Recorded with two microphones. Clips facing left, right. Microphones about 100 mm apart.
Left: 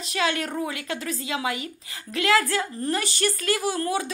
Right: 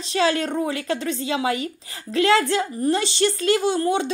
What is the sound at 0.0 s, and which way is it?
A woman's voice, 30° right (ahead or behind).